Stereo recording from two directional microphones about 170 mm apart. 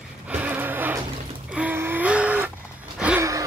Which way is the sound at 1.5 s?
10° right (ahead or behind).